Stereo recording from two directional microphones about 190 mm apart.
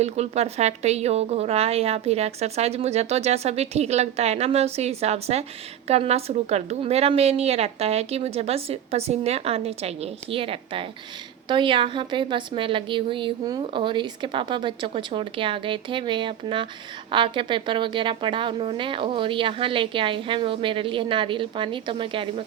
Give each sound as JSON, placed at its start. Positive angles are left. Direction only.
{"t": 0.0, "sound": "a woman's voice", "side_deg": -35}